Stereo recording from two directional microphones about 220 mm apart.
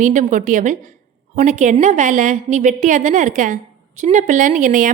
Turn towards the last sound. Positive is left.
turn(degrees=-35)  # may be behind; listen again after turning